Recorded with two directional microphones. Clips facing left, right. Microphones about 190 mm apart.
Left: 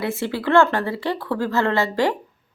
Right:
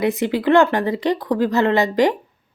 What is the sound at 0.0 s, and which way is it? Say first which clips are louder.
Speech: right 5 dB; 20° right (ahead or behind).